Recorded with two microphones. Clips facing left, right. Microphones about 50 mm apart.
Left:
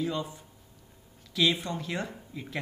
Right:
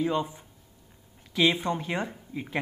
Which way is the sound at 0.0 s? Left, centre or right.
Right.